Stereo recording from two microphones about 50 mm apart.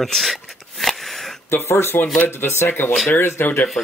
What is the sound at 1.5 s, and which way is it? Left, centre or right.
Speech, left.